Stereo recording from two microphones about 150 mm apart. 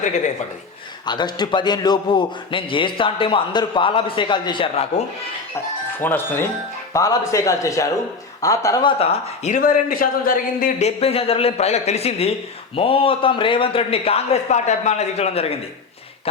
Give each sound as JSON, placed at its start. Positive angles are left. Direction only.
{"t": 1.0, "sound": "a man's voice", "side_deg": 30}
{"t": 6.0, "sound": "a man's voice", "side_deg": 15}
{"t": 10.8, "sound": "a man's voice", "side_deg": 40}